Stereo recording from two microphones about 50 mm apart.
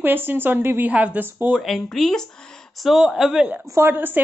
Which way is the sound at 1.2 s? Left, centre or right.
Right.